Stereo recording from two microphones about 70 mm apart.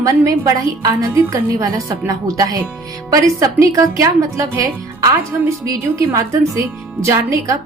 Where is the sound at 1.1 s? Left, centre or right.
Right.